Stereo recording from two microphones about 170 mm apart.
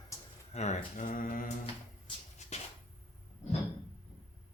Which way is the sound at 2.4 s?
40° left (ahead or behind).